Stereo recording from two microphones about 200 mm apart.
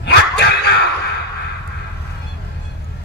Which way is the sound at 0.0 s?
55° left (ahead or behind).